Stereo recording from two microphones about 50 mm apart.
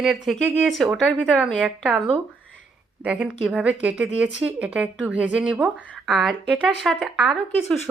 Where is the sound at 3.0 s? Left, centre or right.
Right.